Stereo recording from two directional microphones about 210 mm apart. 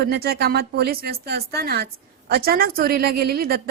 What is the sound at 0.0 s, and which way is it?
A woman's voice, 50° right (ahead or behind).